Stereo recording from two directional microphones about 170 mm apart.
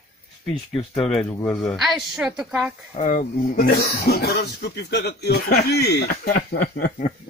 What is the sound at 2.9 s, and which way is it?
Speech, 50° left (ahead or behind).